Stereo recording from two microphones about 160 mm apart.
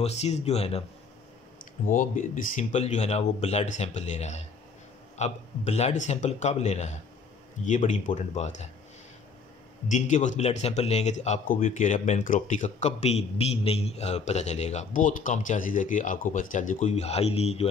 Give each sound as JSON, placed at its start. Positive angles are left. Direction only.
{"t": 0.0, "sound": "speech", "side_deg": 40}
{"t": 1.6, "sound": "speech", "side_deg": 55}
{"t": 9.8, "sound": "speech", "side_deg": 50}